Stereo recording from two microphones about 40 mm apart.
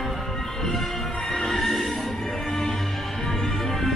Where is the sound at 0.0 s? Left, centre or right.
Centre.